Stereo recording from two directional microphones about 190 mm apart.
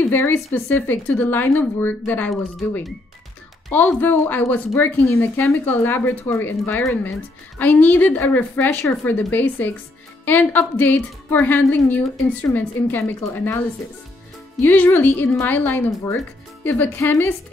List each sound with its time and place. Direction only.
0.1 s a woman's voice: 10° left (ahead or behind)
14.6 s a woman's voice: 10° left (ahead or behind)